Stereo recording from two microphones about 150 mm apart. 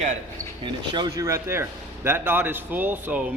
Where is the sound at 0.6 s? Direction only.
30° right (ahead or behind); by 3.3 s 10° right (ahead or behind).